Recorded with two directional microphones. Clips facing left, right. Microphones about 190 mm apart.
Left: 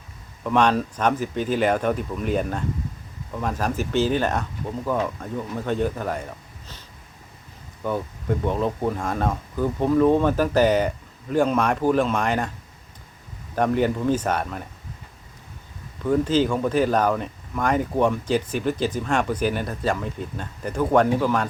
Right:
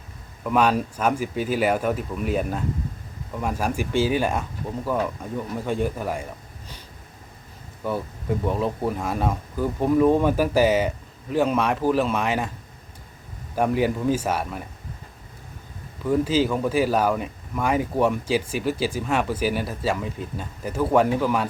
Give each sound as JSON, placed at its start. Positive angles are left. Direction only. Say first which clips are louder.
{"t": 0.4, "sound": "speech", "louder": "left 1 dB", "side_deg": -5}
{"t": 7.9, "sound": "speech", "louder": "left 1 dB", "side_deg": -5}
{"t": 13.6, "sound": "speech", "louder": "left 1 dB", "side_deg": -5}
{"t": 16.0, "sound": "speech", "louder": "left 1 dB", "side_deg": -5}